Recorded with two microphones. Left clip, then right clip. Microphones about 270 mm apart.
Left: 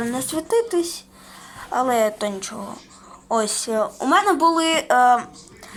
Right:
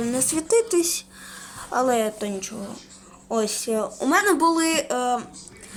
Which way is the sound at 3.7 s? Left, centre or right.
Centre.